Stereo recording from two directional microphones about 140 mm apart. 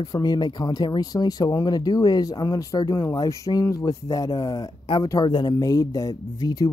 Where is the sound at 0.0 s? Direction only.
30° left (ahead or behind).